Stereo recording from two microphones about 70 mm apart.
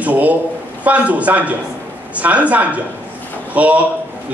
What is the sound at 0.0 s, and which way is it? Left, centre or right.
A man's voice, right.